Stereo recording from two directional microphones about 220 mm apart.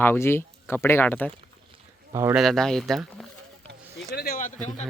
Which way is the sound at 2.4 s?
Centre (ahead or behind).